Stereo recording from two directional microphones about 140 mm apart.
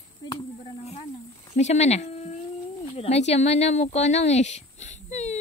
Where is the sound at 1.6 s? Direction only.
55° left (ahead or behind).